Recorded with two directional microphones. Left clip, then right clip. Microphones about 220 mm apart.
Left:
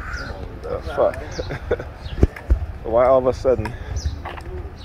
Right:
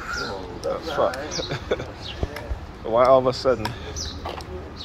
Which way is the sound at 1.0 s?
40° left (ahead or behind).